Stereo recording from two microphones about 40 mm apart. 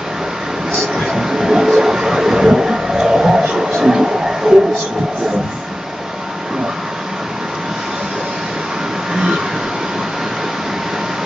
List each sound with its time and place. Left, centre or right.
0.9 s train: centre
3.5 s a sound: centre
9.1 s vehicle: centre